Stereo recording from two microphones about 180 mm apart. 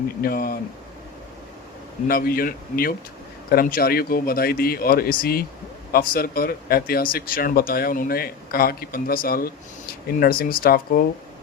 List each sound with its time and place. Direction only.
0.2 s speech: 55° left (ahead or behind)
2.0 s speech: 55° left (ahead or behind)